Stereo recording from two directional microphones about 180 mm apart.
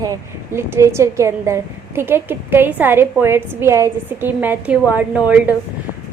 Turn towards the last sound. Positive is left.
turn(degrees=-10)  # may be behind; listen again after turning